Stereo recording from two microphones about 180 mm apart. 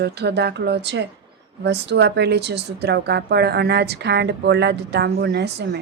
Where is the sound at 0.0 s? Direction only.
65° right (ahead or behind).